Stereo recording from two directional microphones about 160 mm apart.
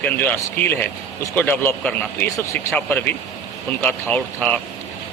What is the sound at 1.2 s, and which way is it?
Speech, 15° left (ahead or behind).